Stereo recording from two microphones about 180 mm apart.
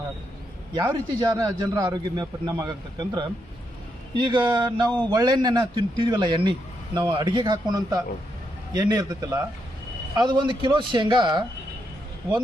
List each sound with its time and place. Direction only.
0.7 s a man's voice: 20° right (ahead or behind)